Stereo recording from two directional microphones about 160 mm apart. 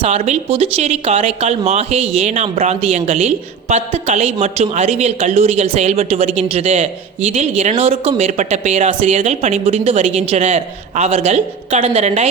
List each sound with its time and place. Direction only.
0.0 s speech: 45° right (ahead or behind)